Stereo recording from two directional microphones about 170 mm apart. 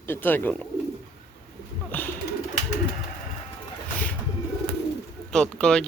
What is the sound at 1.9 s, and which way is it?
Bird, 10° left (ahead or behind).